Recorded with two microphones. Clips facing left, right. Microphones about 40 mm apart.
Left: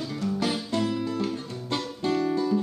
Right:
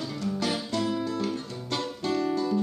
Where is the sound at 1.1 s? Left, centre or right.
Centre.